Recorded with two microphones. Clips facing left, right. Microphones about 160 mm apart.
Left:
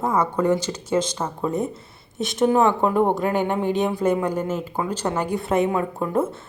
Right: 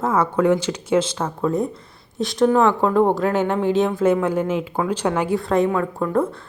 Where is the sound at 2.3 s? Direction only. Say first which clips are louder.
Right 2 dB; 20° left (ahead or behind).